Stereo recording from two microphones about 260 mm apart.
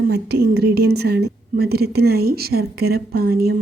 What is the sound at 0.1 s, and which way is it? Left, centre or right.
A woman's voice, right.